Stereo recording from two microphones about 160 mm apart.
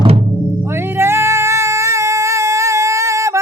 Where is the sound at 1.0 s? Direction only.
15° right (ahead or behind).